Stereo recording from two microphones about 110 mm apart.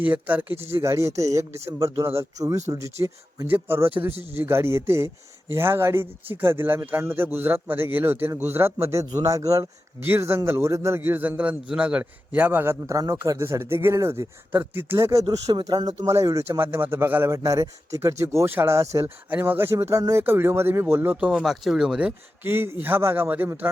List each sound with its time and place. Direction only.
0.0 s a man's voice: 15° right (ahead or behind)
15.6 s a man's voice: 35° right (ahead or behind)
19.0 s a man's voice: 15° right (ahead or behind)
22.4 s a man's voice: 20° right (ahead or behind)